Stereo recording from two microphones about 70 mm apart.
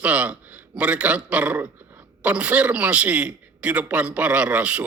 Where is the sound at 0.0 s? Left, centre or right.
Right.